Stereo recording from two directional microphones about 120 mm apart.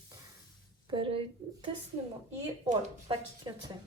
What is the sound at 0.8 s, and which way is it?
Speech, 45° right (ahead or behind).